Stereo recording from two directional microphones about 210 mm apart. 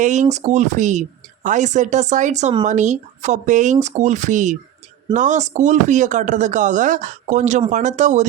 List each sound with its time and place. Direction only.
0.0 s speech: 35° right (ahead or behind)